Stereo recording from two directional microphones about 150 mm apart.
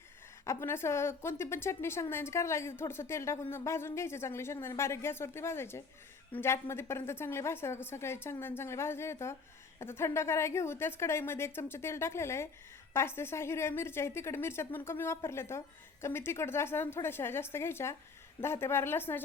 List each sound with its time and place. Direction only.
0.4 s a woman's voice: 15° left (ahead or behind)